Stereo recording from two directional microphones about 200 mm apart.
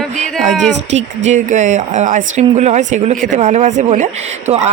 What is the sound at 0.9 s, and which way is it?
Speech, 35° right (ahead or behind).